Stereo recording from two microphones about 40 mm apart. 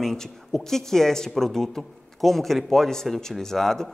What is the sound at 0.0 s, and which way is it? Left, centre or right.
A woman's voice, centre.